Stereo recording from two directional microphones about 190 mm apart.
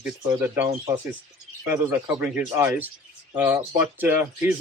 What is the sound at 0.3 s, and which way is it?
Speech, 10° right (ahead or behind).